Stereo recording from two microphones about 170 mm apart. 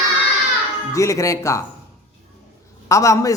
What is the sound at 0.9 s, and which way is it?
Speech, 20° left (ahead or behind).